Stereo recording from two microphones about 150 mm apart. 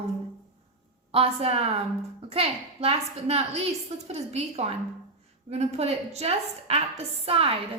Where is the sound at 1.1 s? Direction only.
40° right (ahead or behind).